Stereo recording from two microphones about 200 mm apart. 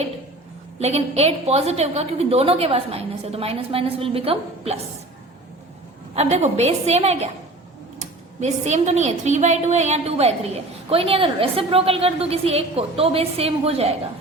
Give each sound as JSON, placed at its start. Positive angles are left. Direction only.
{"t": 0.8, "sound": "a woman's voice", "side_deg": -30}
{"t": 6.1, "sound": "a woman's voice", "side_deg": -35}
{"t": 8.4, "sound": "a woman's voice", "side_deg": -35}